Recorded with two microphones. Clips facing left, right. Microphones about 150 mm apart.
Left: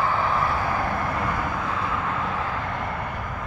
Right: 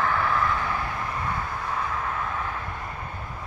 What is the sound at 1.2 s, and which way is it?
Vehicle, 90° left.